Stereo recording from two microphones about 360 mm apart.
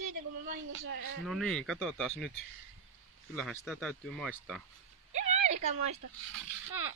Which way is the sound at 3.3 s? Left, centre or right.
Centre.